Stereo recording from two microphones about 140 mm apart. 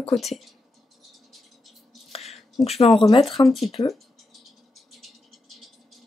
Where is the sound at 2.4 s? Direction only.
Centre (ahead or behind).